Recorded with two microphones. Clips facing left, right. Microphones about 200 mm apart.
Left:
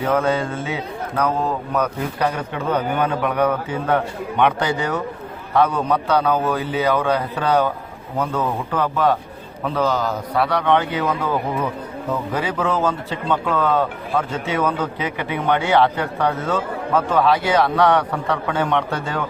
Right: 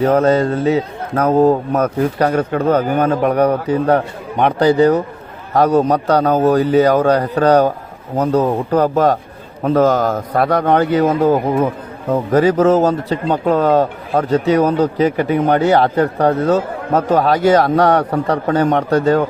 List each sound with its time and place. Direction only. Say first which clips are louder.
0.0 s a man's voice: right 7 dB; 40° right (ahead or behind)